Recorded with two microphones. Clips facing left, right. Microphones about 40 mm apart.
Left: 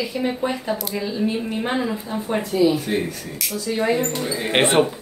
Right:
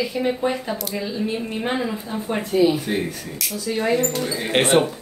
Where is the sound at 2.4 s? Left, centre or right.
Right.